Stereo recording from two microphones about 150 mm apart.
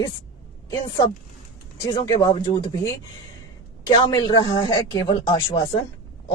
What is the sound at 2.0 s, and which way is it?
Speech, 25° left (ahead or behind).